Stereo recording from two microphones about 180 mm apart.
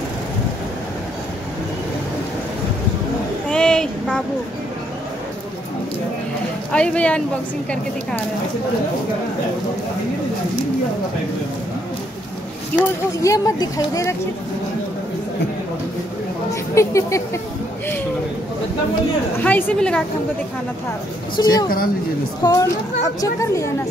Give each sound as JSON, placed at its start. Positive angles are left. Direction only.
{"t": 3.4, "sound": "a sound", "side_deg": 5}
{"t": 6.7, "sound": "speech", "side_deg": 5}
{"t": 12.7, "sound": "speech", "side_deg": 20}
{"t": 16.7, "sound": "speech", "side_deg": 15}
{"t": 19.4, "sound": "speech", "side_deg": 5}
{"t": 21.4, "sound": "a woman's voice", "side_deg": 20}